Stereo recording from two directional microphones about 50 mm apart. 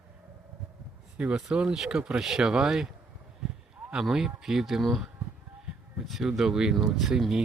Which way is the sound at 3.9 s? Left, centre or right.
Centre.